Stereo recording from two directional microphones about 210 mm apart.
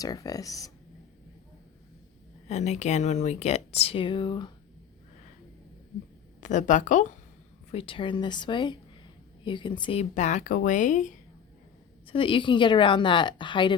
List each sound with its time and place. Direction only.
0.0 s speech: 15° left (ahead or behind)
2.5 s speech: 35° left (ahead or behind)
6.4 s a woman's voice: 35° left (ahead or behind)
12.0 s a woman's voice: 25° left (ahead or behind)